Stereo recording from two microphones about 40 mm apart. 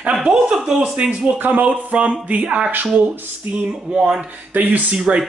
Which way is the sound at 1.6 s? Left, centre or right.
Right.